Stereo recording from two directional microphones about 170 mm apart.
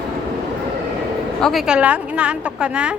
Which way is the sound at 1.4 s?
Centre (ahead or behind).